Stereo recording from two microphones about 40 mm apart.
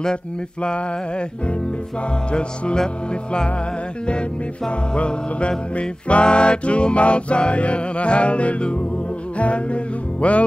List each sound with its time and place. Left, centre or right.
0.0 s music: left
2.3 s music: left
4.6 s music: left